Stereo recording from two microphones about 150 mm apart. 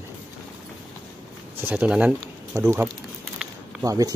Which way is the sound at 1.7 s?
10° right (ahead or behind).